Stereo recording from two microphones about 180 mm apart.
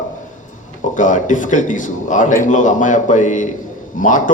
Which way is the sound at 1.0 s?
45° left (ahead or behind).